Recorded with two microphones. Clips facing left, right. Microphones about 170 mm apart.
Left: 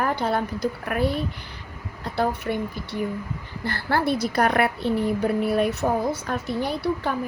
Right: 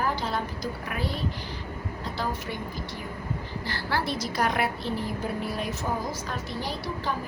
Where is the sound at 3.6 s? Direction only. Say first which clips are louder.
Left 7 dB; 55° left (ahead or behind).